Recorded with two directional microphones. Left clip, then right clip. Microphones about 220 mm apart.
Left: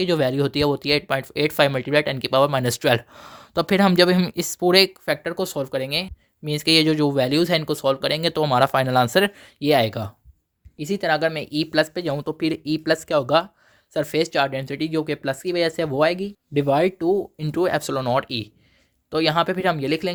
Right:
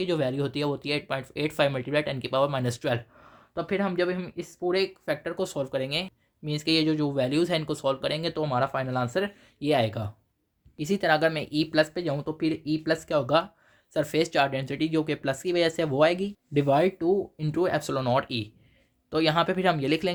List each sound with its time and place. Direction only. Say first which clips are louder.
0.0 s speech: left 7 dB; 35° left (ahead or behind)
10.8 s speech: left 2 dB; 20° left (ahead or behind)
17.0 s speech: left 4 dB; 40° left (ahead or behind); by 20.1 s 20° left (ahead or behind)